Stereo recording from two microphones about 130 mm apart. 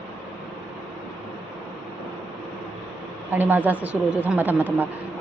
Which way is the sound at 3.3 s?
15° right (ahead or behind).